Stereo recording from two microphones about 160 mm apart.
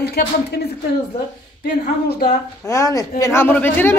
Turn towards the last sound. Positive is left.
turn(degrees=10)  # may be behind; listen again after turning